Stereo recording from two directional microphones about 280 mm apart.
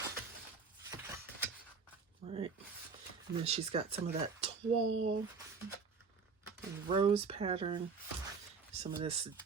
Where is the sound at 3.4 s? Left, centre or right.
Right.